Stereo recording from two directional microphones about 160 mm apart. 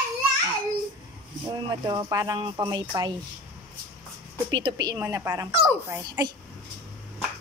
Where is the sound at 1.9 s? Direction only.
25° right (ahead or behind).